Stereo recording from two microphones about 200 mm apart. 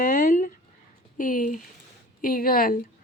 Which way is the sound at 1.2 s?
40° left (ahead or behind).